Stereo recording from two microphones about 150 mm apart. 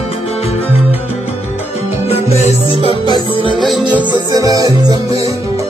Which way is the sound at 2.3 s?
45° left (ahead or behind).